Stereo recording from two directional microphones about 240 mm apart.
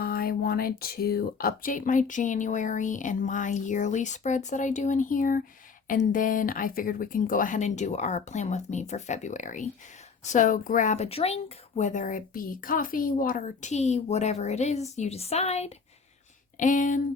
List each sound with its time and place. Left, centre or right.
0.0 s speech: left